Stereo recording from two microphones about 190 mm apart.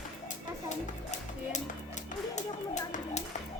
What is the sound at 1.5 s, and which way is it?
Music, 40° left (ahead or behind).